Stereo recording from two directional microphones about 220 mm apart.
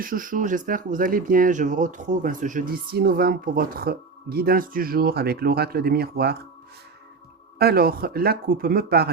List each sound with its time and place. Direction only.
0.0 s speech: 40° right (ahead or behind)
7.6 s speech: 45° right (ahead or behind)